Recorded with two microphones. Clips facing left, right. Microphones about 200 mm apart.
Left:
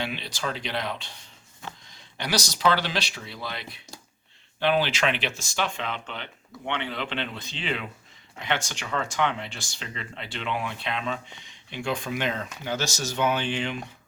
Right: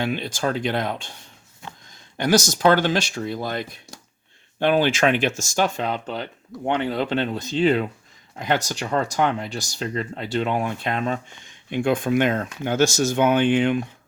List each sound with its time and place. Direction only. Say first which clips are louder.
0.0 s speech: right 7 dB; 50° right (ahead or behind)